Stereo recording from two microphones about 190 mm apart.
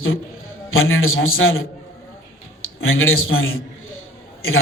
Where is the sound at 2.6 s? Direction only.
90° left.